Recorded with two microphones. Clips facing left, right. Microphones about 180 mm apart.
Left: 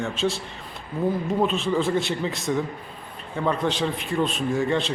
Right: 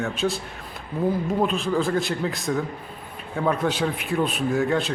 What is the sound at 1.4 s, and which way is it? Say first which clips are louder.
A man's voice: left 1 dB; centre (ahead or behind).